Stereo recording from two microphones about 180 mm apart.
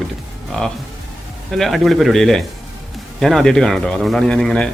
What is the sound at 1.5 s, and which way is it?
A man's voice, centre (ahead or behind).